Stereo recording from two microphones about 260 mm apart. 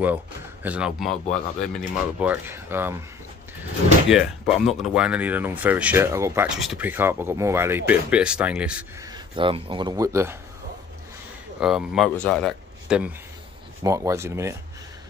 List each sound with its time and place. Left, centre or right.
0.0 s speech: centre
4.1 s speech: centre
9.1 s speech: centre
11.6 s speech: centre